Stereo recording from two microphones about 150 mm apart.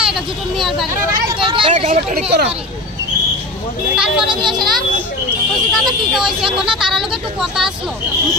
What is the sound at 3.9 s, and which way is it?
Speech, 5° right (ahead or behind).